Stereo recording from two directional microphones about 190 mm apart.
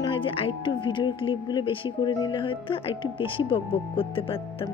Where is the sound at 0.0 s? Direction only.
25° left (ahead or behind).